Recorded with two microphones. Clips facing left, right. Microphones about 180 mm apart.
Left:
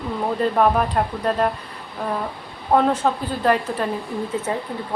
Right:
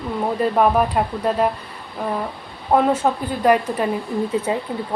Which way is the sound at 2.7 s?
5° right (ahead or behind).